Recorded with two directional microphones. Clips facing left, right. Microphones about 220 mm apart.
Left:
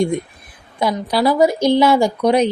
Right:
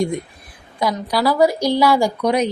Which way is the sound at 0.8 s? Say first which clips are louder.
Left 2 dB; 25° left (ahead or behind).